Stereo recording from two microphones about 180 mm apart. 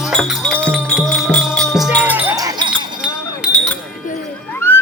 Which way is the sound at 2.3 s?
20° right (ahead or behind).